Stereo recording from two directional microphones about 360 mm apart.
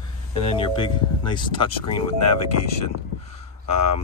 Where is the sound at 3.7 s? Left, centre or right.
Left.